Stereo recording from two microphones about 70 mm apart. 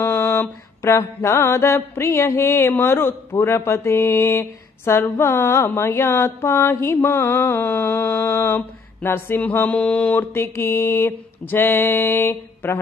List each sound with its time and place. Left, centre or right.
0.0 s mantra: left
2.8 s speech: left
8.5 s mantra: left
10.3 s speech: left